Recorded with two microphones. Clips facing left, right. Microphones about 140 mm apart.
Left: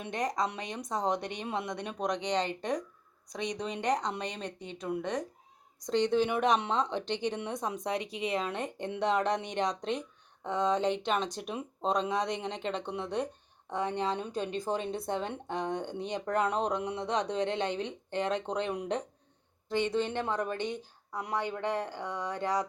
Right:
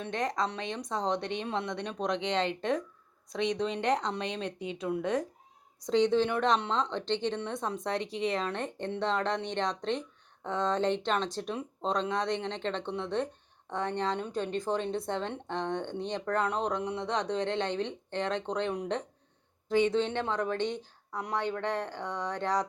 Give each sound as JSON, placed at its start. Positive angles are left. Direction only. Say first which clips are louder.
{"t": 0.0, "sound": "speech", "louder": "even", "side_deg": 10}